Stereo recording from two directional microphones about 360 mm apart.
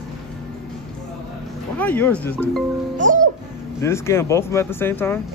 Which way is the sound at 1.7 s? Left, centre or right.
Centre.